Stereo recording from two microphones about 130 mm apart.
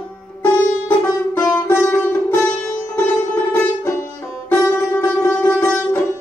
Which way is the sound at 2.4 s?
10° left (ahead or behind).